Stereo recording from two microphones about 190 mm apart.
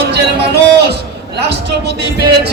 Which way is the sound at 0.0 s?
60° right (ahead or behind).